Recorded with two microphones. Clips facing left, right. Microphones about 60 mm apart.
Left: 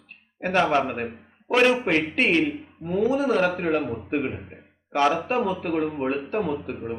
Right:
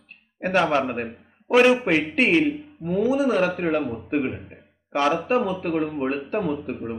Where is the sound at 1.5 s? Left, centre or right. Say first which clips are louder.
Right 3 dB; centre.